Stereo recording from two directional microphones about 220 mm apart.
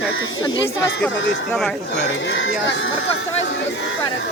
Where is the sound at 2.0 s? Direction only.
60° left (ahead or behind).